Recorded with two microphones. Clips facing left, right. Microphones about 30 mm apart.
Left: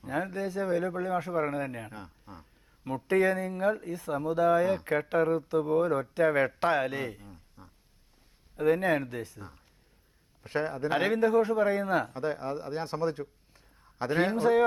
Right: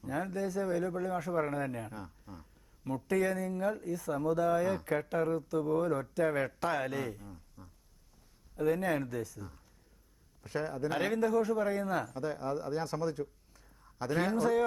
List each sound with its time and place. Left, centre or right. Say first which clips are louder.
0.0 s a man's voice: left 3 dB; left